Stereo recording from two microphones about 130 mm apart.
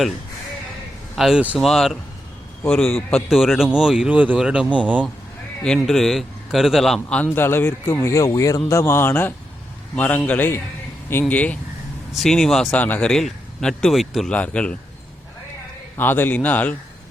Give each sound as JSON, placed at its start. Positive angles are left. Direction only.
{"t": 1.1, "sound": "a man's voice", "side_deg": -5}
{"t": 5.6, "sound": "a man's voice", "side_deg": 0}
{"t": 16.0, "sound": "speech", "side_deg": 15}